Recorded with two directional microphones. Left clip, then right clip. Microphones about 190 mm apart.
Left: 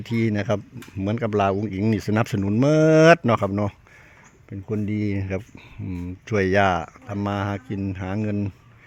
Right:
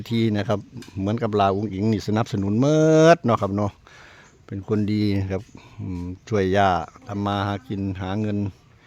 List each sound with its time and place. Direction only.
0.0 s speech: 5° right (ahead or behind)
4.4 s speech: 25° right (ahead or behind)
5.1 s speech: 10° right (ahead or behind)